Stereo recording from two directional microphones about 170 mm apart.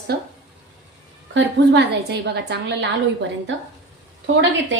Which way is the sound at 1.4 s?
90° right.